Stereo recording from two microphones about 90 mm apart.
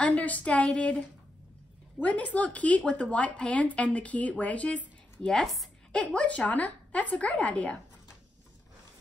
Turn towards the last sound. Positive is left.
turn(degrees=15)  # may be behind; listen again after turning